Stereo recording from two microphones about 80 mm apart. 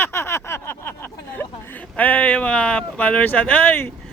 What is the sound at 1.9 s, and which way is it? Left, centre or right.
Speech, centre.